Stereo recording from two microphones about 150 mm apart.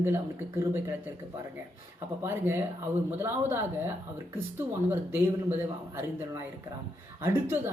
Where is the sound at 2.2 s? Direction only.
15° right (ahead or behind).